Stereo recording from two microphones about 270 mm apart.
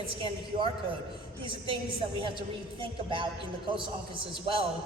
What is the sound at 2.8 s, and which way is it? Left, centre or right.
A man's voice, centre.